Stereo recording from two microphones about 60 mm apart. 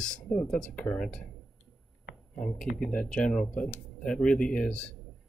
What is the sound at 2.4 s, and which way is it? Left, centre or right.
Speech, centre.